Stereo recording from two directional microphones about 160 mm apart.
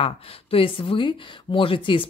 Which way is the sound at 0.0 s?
35° left (ahead or behind).